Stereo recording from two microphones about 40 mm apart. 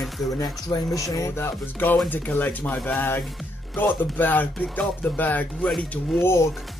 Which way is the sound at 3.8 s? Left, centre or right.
Left.